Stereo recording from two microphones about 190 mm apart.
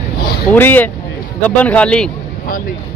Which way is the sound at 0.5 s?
10° left (ahead or behind).